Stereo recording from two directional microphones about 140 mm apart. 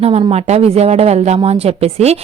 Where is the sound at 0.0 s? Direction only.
45° right (ahead or behind).